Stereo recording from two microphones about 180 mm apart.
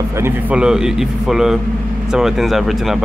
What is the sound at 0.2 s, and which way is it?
Speech, 5° right (ahead or behind).